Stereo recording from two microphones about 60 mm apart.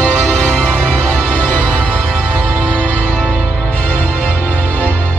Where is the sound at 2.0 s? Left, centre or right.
Centre.